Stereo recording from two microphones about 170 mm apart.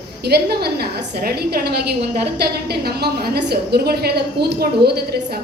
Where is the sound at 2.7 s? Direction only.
70° right (ahead or behind).